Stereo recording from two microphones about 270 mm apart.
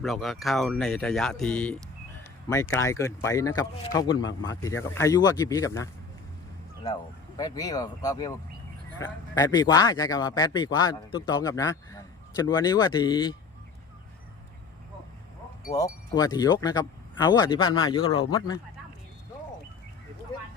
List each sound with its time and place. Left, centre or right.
0.0 s speech: centre
7.3 s speech: centre
9.3 s speech: centre
15.7 s speech: centre